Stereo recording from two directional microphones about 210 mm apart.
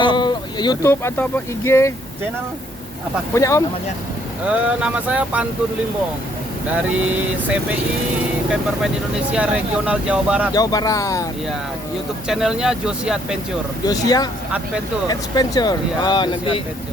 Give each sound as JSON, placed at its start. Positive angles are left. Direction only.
{"t": 0.0, "sound": "speech", "side_deg": 20}
{"t": 3.3, "sound": "speech", "side_deg": 15}
{"t": 4.4, "sound": "speech", "side_deg": -5}
{"t": 6.9, "sound": "speech", "side_deg": -5}
{"t": 9.3, "sound": "speech", "side_deg": -5}
{"t": 10.5, "sound": "speech", "side_deg": 20}
{"t": 12.3, "sound": "speech", "side_deg": 0}
{"t": 13.8, "sound": "speech", "side_deg": 15}